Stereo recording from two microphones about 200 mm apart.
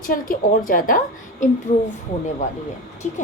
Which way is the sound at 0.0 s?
45° left (ahead or behind).